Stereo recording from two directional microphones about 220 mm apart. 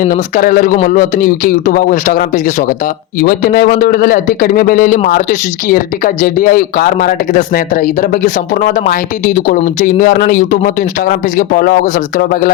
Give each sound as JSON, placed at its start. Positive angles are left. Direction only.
{"t": 0.0, "sound": "speech", "side_deg": 40}